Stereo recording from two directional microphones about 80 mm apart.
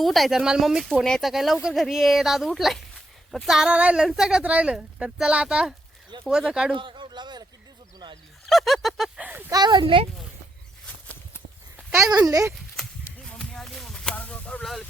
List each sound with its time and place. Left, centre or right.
0.0 s speech: centre
1.0 s speech: centre
1.3 s speech: centre
6.7 s speech: right
8.4 s speech: centre
9.1 s speech: right
9.5 s speech: right
11.9 s speech: right
12.5 s a sound: centre